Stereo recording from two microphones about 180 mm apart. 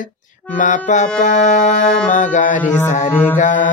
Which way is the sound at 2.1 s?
45° left (ahead or behind).